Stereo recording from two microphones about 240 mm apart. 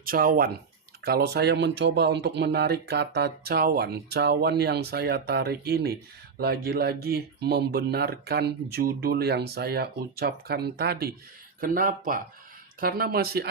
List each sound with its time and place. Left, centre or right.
0.0 s speech: right